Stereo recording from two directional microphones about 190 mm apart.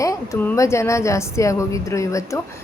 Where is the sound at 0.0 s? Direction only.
15° left (ahead or behind).